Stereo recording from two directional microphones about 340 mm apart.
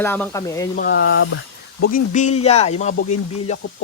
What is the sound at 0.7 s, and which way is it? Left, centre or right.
Speech, left.